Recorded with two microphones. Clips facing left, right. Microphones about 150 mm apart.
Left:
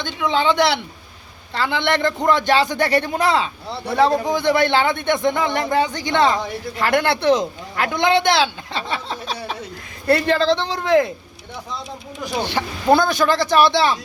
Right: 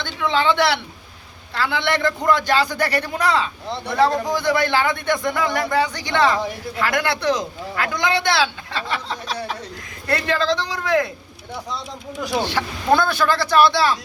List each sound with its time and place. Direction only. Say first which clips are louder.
0.0 s a woman's voice: left 1 dB; 15° left (ahead or behind)
12.4 s a man's voice: left 3 dB; 15° left (ahead or behind)